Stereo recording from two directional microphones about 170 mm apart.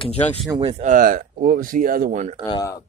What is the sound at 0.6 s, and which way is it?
Speech, 35° right (ahead or behind).